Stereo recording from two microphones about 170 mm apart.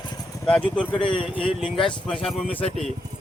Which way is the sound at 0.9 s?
30° left (ahead or behind).